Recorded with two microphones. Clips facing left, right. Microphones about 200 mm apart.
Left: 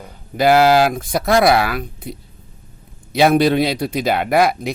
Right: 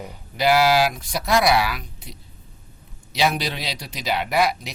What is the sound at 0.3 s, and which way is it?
Speech, 50° left (ahead or behind).